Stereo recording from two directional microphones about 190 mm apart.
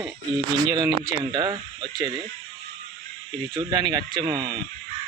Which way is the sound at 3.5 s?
25° right (ahead or behind).